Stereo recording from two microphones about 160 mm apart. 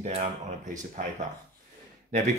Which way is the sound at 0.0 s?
50° right (ahead or behind).